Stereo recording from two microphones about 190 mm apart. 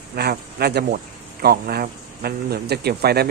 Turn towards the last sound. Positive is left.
turn(degrees=-55)  # may be behind; listen again after turning